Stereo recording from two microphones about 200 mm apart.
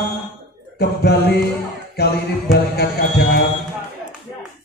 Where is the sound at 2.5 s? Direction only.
55° left (ahead or behind).